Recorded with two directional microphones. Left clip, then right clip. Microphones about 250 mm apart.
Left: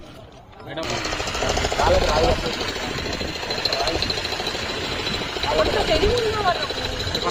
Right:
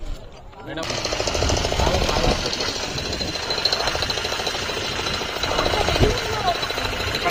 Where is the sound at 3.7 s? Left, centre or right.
Right.